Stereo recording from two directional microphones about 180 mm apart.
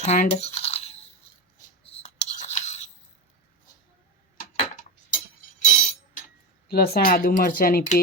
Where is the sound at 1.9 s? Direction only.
35° left (ahead or behind).